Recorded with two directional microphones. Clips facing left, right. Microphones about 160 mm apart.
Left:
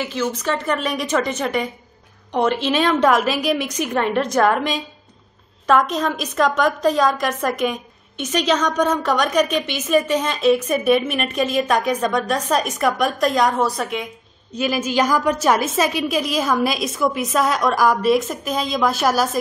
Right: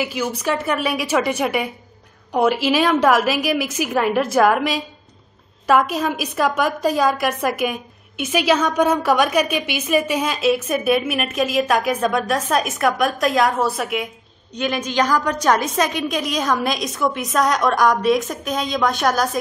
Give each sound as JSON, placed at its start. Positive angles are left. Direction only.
{"t": 0.0, "sound": "a woman's voice", "side_deg": -10}